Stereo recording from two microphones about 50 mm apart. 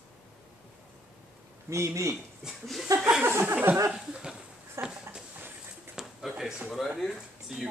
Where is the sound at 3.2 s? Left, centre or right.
Right.